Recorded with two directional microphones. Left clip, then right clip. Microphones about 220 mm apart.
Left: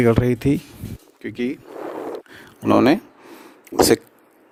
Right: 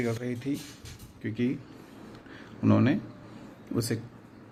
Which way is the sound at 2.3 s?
50° left (ahead or behind).